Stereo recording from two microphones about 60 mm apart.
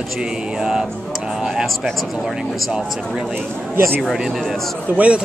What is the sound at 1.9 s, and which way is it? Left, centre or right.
Speech, centre.